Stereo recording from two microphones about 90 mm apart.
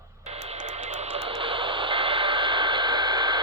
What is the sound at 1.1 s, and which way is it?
Radio, 90° right.